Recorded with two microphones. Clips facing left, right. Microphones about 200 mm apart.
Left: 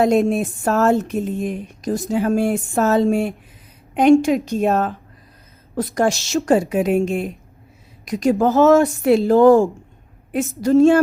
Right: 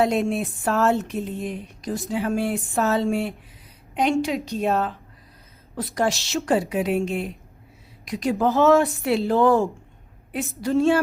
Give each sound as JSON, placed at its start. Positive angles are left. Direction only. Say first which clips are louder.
{"t": 0.0, "sound": "a woman's voice", "louder": "left 5 dB", "side_deg": 45}